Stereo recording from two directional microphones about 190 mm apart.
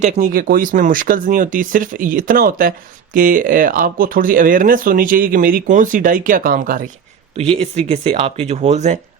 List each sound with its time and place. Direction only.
0.0 s speech: 45° right (ahead or behind)
7.3 s speech: 30° right (ahead or behind)